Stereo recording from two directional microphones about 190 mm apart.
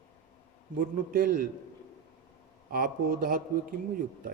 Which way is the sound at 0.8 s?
45° right (ahead or behind).